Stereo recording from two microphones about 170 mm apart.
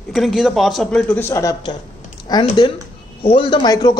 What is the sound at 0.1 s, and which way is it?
A man's voice, centre (ahead or behind).